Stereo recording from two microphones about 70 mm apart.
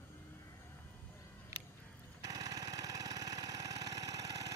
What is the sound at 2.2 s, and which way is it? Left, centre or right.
Jackhammer, right.